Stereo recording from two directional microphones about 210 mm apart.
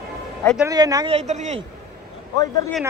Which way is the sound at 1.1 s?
35° right (ahead or behind).